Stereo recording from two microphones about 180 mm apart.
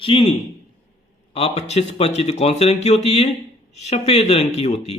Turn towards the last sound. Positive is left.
turn(degrees=35)  # may be behind; listen again after turning